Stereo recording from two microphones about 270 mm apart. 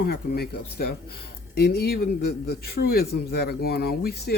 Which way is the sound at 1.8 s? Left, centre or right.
Left.